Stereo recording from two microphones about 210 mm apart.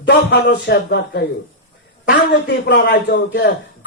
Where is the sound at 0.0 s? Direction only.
55° left (ahead or behind).